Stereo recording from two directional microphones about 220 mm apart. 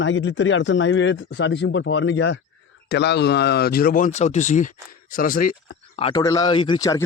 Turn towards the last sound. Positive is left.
turn(degrees=20)  # may be behind; listen again after turning